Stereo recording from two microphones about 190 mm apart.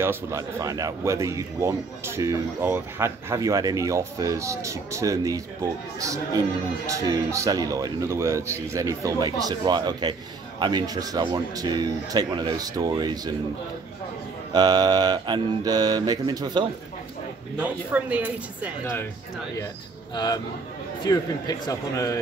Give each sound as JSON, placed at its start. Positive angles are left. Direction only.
{"t": 0.0, "sound": "a man's voice", "side_deg": -15}
{"t": 14.5, "sound": "speech", "side_deg": -20}
{"t": 17.6, "sound": "a man's voice", "side_deg": -10}
{"t": 21.0, "sound": "a man's voice", "side_deg": 20}